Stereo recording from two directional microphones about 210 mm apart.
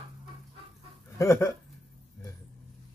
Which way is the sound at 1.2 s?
15° left (ahead or behind).